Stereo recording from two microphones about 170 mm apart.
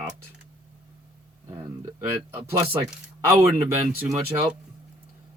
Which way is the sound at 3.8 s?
20° right (ahead or behind).